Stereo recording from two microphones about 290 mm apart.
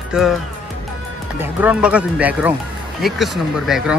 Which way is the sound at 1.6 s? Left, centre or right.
Centre.